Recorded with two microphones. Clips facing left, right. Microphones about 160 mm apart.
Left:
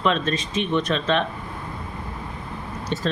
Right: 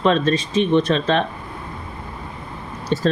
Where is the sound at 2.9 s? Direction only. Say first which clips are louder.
Right 7 dB; 40° right (ahead or behind).